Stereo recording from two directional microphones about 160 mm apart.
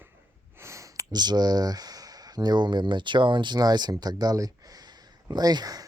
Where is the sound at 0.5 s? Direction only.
15° right (ahead or behind).